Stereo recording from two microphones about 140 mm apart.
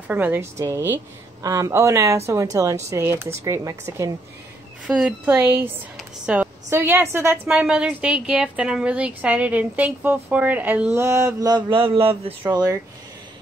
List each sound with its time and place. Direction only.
0.1 s a woman's voice: 15° right (ahead or behind)
4.8 s a woman's voice: 10° right (ahead or behind)
7.4 s a woman's voice: 5° right (ahead or behind); by 12.4 s 45° right (ahead or behind)
12.4 s a woman's voice: 30° right (ahead or behind)